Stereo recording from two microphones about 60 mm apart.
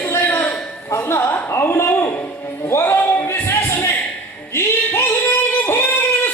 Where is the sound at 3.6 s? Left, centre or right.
Left.